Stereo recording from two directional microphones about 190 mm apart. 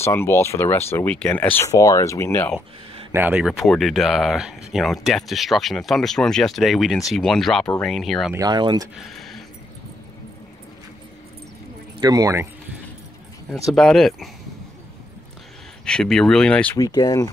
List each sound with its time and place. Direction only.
0.0 s speech: 15° left (ahead or behind)
3.1 s speech: 10° right (ahead or behind)
8.3 s speech: 20° right (ahead or behind)
8.9 s speech: centre (ahead or behind)
12.0 s speech: 20° right (ahead or behind)
13.7 s speech: centre (ahead or behind)
15.8 s speech: 5° left (ahead or behind)
16.7 s speech: 20° left (ahead or behind)